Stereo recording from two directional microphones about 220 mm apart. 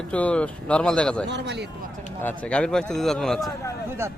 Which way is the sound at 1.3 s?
50° right (ahead or behind).